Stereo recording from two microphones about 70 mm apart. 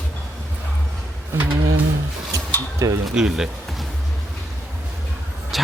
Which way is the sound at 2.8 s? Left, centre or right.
Right.